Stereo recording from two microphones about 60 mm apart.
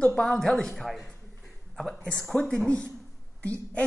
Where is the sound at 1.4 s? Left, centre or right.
Centre.